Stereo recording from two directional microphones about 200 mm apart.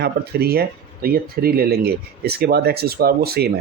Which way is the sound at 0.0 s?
50° right (ahead or behind).